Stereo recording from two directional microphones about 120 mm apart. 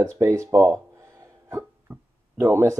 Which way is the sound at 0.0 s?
25° right (ahead or behind).